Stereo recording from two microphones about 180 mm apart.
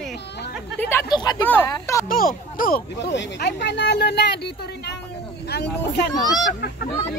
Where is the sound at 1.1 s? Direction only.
20° left (ahead or behind).